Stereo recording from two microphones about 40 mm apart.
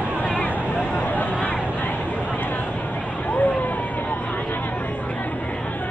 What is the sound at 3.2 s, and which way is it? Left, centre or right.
Hubbub, left.